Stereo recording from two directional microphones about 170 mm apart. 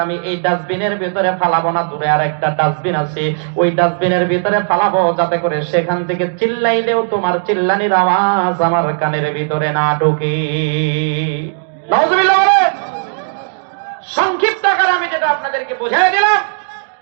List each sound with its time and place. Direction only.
0.0 s a man's voice: 20° left (ahead or behind)
14.2 s speech: 20° left (ahead or behind)